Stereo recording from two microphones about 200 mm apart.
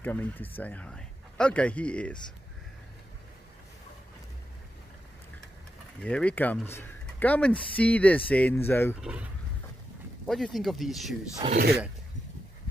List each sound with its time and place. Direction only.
0.0 s speech: 10° left (ahead or behind)
6.0 s speech: 5° left (ahead or behind)
9.0 s speech: 5° right (ahead or behind)
11.4 s speech: 35° right (ahead or behind)